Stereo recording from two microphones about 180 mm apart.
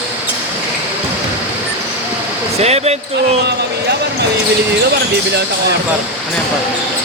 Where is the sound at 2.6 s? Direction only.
35° right (ahead or behind).